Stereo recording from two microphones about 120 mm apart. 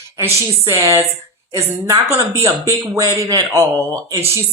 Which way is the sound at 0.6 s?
25° right (ahead or behind).